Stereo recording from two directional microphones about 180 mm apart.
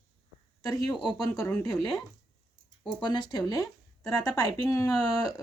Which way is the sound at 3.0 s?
25° left (ahead or behind).